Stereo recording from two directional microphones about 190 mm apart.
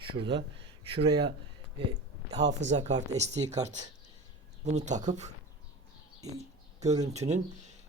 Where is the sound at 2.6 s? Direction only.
40° right (ahead or behind).